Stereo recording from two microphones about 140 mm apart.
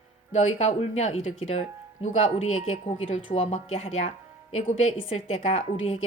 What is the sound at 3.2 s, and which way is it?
Speech, 45° left (ahead or behind).